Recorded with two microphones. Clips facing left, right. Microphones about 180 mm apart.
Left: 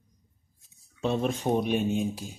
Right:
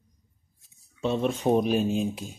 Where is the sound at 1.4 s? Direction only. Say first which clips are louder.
Right 4 dB; 15° right (ahead or behind).